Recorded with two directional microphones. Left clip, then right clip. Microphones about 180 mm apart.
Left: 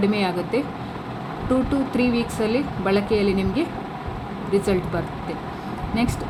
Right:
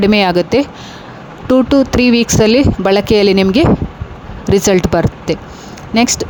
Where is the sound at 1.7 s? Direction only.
55° right (ahead or behind).